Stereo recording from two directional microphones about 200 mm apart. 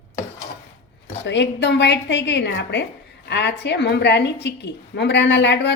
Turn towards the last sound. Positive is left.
turn(degrees=60)  # may be behind; listen again after turning